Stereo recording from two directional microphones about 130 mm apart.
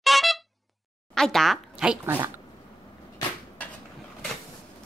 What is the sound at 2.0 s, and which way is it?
Speech, 15° right (ahead or behind).